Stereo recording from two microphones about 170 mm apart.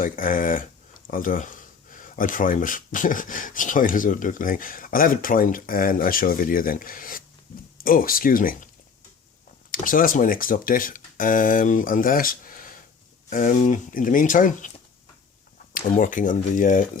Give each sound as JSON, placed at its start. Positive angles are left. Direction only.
{"t": 0.0, "sound": "speech", "side_deg": 55}
{"t": 9.8, "sound": "speech", "side_deg": 55}
{"t": 15.7, "sound": "speech", "side_deg": 50}